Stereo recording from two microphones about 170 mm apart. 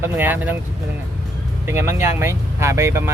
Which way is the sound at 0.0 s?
10° right (ahead or behind).